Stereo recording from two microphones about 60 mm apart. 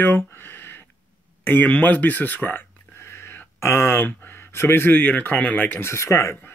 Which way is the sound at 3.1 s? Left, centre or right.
Left.